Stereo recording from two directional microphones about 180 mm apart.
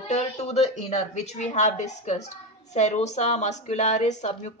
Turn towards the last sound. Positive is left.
turn(degrees=40)  # may be behind; listen again after turning